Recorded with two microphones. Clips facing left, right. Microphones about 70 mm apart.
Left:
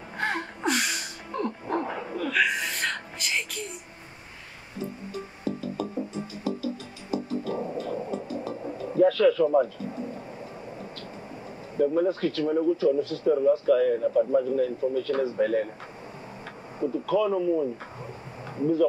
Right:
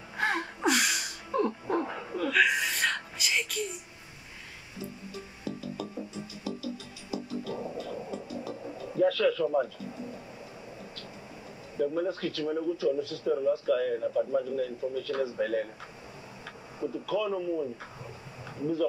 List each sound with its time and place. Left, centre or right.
0.2 s gasp: centre
1.9 s dog: left
2.1 s a sound: centre
4.7 s music: left
9.9 s a sound: left
11.7 s a man's voice: left
13.9 s speech: left
14.5 s a man's voice: left
16.8 s a man's voice: left
18.6 s a man's voice: left